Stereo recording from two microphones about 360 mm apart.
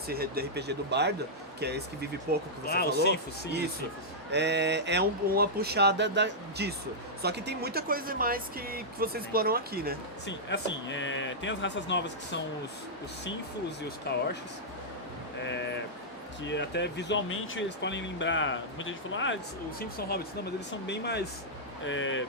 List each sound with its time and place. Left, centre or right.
0.1 s speech: right
2.6 s speech: left
4.3 s speech: right
10.2 s speech: left
14.1 s speech: left
15.4 s a sound: left
16.5 s speech: left
20.8 s speech: left